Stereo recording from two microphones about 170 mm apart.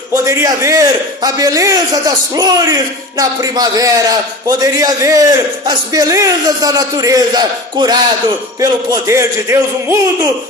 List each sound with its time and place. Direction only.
0.1 s a man's voice: 15° right (ahead or behind)